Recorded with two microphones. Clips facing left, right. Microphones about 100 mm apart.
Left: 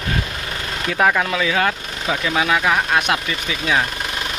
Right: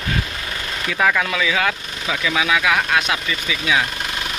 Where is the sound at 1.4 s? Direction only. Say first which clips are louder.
Left 1 dB; 40° left (ahead or behind).